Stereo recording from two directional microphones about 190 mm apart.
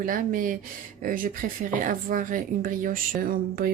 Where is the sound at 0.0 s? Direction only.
45° right (ahead or behind).